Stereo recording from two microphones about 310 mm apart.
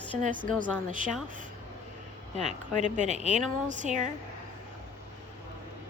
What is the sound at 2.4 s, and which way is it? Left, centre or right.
Speech, right.